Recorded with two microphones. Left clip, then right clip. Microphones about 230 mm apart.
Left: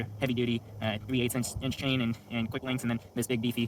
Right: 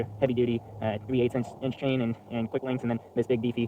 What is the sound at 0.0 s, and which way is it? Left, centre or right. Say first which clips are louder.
Speech: right 5 dB; left.